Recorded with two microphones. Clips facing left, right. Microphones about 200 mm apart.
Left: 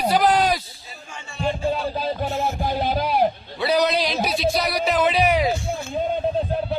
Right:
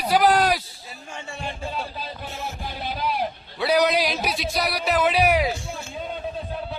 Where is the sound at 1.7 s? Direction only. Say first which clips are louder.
Left 8 dB; 45° left (ahead or behind).